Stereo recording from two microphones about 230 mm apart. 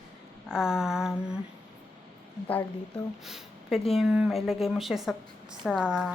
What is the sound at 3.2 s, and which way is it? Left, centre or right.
A woman's voice, centre.